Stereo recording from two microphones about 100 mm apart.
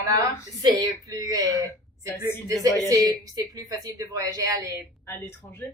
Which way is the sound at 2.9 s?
40° right (ahead or behind).